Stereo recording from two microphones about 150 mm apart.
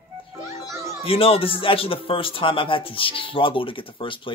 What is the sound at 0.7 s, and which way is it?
Children playing, 20° right (ahead or behind).